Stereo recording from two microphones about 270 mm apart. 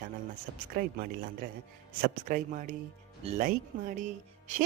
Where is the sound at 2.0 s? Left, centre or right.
Right.